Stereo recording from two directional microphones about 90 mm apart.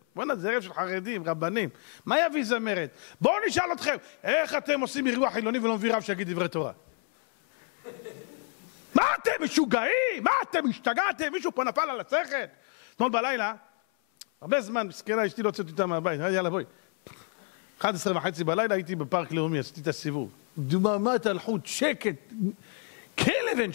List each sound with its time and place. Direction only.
0.1 s a man's voice: 20° left (ahead or behind)
8.9 s a man's voice: 20° left (ahead or behind)
17.8 s a man's voice: 15° left (ahead or behind)
23.1 s a sound: 15° left (ahead or behind)